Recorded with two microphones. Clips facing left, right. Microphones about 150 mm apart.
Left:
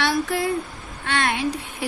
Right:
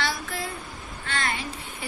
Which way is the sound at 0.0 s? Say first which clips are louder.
Left 8 dB; 60° left (ahead or behind).